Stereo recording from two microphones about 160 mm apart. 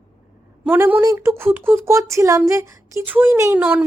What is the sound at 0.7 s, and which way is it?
A woman's voice, 15° right (ahead or behind).